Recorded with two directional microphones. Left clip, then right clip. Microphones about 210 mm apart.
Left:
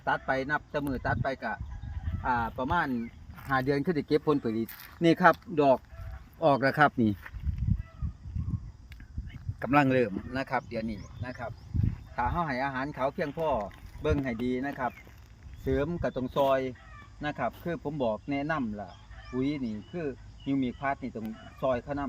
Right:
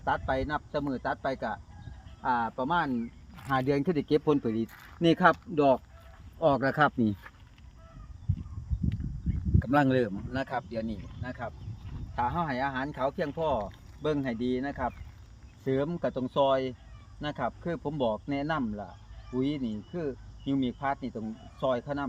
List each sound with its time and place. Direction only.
0.0 s speech: 5° left (ahead or behind); by 7.2 s 30° left (ahead or behind)
9.6 s speech: 25° left (ahead or behind)
10.5 s speech: 10° left (ahead or behind)